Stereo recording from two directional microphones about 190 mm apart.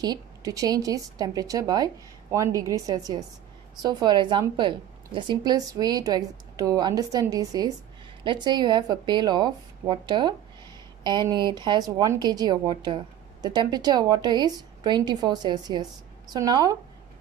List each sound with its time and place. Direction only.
0.0 s a woman's voice: 20° right (ahead or behind)